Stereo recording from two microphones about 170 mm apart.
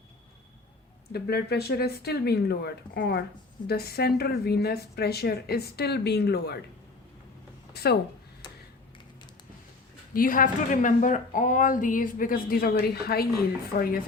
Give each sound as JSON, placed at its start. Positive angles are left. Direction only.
{"t": 1.1, "sound": "a woman's voice", "side_deg": 70}
{"t": 7.7, "sound": "a sound", "side_deg": 70}
{"t": 10.2, "sound": "a woman's voice", "side_deg": 55}